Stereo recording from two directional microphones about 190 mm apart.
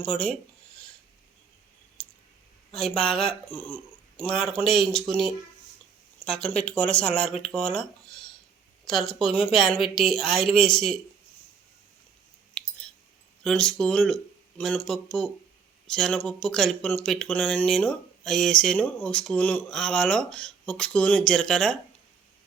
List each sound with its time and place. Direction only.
0.0 s speech: 5° left (ahead or behind)
2.0 s clicking: 5° left (ahead or behind)
2.7 s speech: centre (ahead or behind)
12.6 s a sound: 5° left (ahead or behind)
13.4 s speech: 5° left (ahead or behind)